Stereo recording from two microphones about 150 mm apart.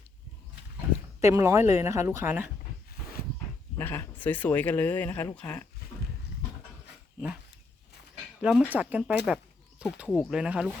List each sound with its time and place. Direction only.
1.2 s speech: 20° right (ahead or behind)
3.8 s speech: 15° left (ahead or behind)
8.4 s speech: 5° right (ahead or behind)
9.2 s a sound: 5° right (ahead or behind)
10.1 s speech: centre (ahead or behind)